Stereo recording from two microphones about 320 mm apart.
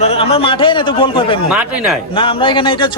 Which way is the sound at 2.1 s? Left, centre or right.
Centre.